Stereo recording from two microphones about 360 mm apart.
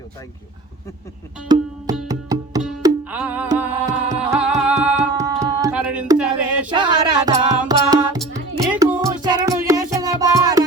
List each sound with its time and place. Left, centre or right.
1.5 s music: centre